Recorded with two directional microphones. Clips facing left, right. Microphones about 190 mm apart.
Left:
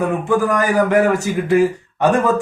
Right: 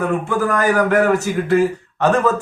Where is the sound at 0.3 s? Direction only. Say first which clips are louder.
Left 3 dB; 15° left (ahead or behind).